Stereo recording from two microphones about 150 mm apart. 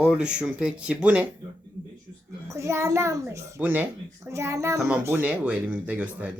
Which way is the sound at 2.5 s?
20° right (ahead or behind).